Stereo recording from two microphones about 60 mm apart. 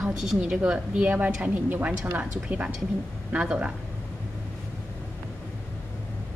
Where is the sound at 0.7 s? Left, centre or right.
Right.